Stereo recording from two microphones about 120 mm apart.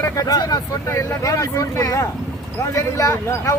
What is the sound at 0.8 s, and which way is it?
Speech, 25° left (ahead or behind).